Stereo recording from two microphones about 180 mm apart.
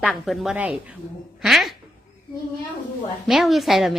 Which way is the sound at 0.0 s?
5° right (ahead or behind).